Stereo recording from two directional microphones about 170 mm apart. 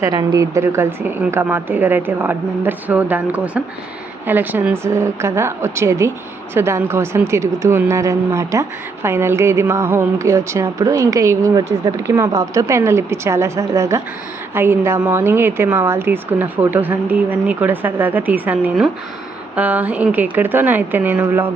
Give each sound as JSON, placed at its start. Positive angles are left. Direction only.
{"t": 0.0, "sound": "speech", "side_deg": -25}